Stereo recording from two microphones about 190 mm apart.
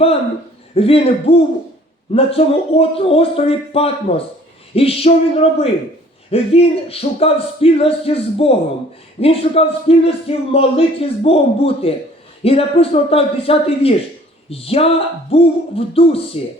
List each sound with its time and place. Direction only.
0.8 s speech: 30° left (ahead or behind)